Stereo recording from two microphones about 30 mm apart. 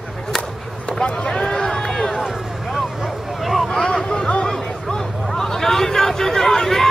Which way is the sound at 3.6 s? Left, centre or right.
Centre.